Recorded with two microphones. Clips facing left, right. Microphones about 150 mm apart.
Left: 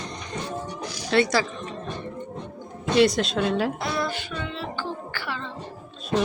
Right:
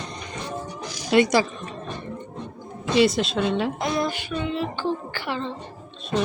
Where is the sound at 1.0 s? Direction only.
15° right (ahead or behind).